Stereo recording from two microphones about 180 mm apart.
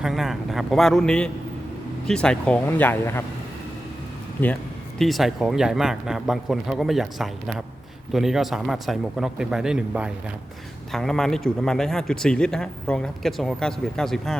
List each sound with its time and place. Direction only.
0.0 s a man's voice: centre (ahead or behind)
4.4 s speech: 10° left (ahead or behind)
4.9 s a man's voice: centre (ahead or behind)